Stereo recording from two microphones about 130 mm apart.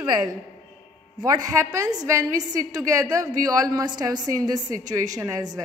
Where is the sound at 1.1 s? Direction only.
30° right (ahead or behind).